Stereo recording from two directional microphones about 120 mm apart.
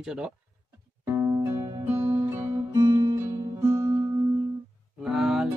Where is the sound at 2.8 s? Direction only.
25° right (ahead or behind).